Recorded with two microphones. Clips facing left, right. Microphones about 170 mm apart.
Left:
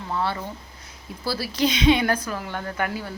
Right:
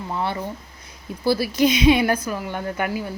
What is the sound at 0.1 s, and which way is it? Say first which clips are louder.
A woman's voice: even; 20° right (ahead or behind).